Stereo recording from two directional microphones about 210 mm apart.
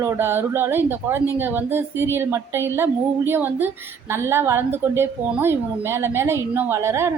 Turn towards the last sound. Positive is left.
turn(degrees=-10)  # may be behind; listen again after turning